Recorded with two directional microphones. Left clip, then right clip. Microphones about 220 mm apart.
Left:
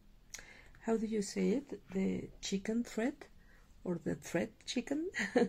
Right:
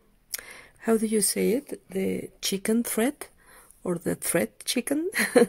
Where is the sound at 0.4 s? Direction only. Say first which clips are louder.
Right 12 dB; 45° right (ahead or behind).